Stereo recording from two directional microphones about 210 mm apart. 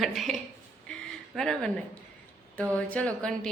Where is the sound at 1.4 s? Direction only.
Centre (ahead or behind).